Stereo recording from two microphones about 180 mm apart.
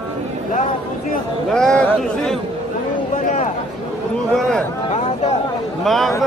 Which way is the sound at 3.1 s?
40° left (ahead or behind).